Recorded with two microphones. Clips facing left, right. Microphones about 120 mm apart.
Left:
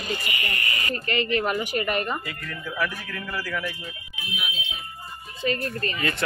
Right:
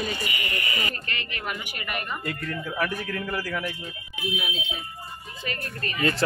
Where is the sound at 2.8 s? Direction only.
40° right (ahead or behind).